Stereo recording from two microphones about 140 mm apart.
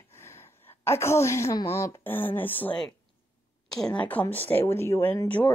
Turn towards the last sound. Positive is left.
turn(degrees=10)  # may be behind; listen again after turning